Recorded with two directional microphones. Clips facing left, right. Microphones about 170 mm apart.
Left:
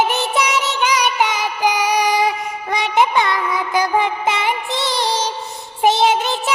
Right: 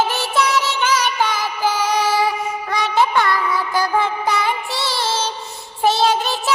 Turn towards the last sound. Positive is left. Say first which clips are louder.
# left 1 dB
turn(degrees=20)  # may be behind; listen again after turning